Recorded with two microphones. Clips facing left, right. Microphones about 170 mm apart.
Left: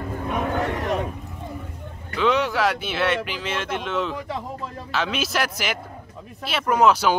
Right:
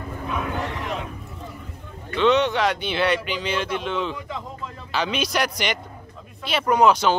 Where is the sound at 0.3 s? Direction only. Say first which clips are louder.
Left 4 dB; 50° left (ahead or behind).